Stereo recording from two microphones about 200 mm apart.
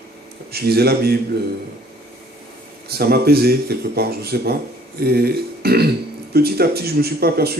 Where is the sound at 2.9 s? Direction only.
50° right (ahead or behind).